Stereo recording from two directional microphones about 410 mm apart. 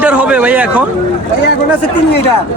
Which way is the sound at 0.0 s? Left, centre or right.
Centre.